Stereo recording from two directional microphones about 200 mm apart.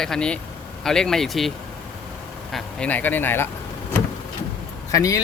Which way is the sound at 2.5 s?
5° left (ahead or behind).